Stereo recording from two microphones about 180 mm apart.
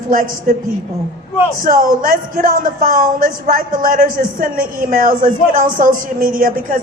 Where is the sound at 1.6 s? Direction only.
50° right (ahead or behind).